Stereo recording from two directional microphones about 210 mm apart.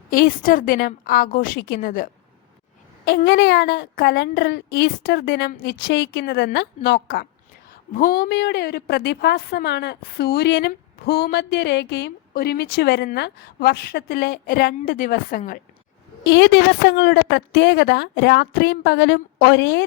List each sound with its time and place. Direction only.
0.1 s a woman's voice: 45° left (ahead or behind)
3.1 s a woman's voice: 50° left (ahead or behind)
16.3 s a woman's voice: 60° left (ahead or behind)